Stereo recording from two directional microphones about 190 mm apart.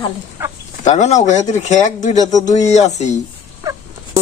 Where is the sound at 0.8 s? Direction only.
40° left (ahead or behind).